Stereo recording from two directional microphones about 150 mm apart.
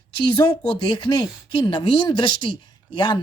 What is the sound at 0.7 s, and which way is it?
Speech, 30° left (ahead or behind).